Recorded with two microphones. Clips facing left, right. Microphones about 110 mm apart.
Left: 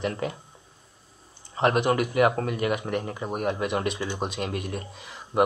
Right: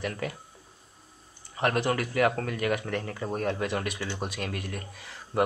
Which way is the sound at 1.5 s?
20° left (ahead or behind).